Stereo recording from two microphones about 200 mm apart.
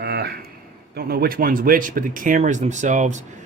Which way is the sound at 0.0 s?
55° right (ahead or behind).